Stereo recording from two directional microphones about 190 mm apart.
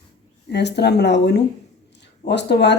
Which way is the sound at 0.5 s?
60° left (ahead or behind).